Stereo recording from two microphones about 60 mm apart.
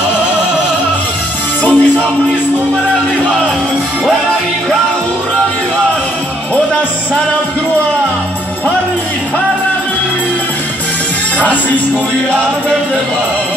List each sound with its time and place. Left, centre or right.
1.6 s music: left
11.3 s music: left